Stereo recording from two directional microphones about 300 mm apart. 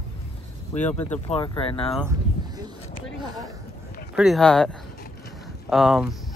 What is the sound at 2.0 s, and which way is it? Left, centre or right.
Speech, centre.